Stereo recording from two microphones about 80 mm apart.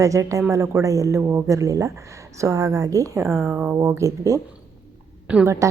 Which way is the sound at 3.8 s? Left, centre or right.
Right.